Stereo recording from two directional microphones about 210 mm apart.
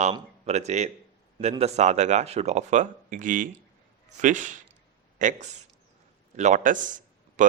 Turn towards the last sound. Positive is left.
turn(degrees=-40)  # may be behind; listen again after turning